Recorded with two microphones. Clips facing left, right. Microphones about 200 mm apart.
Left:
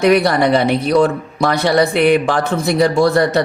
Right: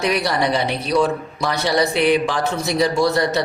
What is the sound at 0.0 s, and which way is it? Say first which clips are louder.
Speech: left 7 dB; 55° left (ahead or behind).